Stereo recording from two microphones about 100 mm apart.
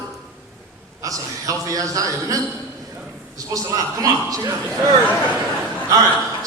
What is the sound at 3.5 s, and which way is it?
Speech, 35° right (ahead or behind).